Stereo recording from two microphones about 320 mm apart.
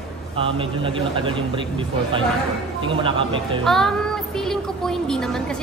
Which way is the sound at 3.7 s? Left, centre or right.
Centre.